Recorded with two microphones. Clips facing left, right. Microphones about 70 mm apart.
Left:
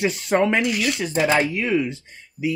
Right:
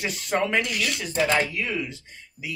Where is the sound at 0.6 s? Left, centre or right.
Centre.